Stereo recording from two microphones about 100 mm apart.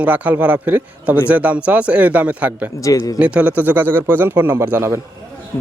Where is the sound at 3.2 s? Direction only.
10° right (ahead or behind).